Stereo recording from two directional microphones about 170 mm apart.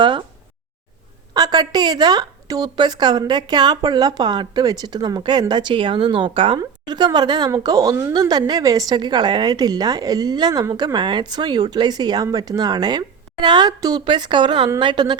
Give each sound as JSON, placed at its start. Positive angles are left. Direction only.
{"t": 0.0, "sound": "a woman's voice", "side_deg": -25}
{"t": 1.3, "sound": "a woman's voice", "side_deg": -25}